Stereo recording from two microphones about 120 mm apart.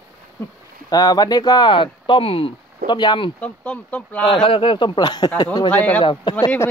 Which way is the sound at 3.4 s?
10° left (ahead or behind).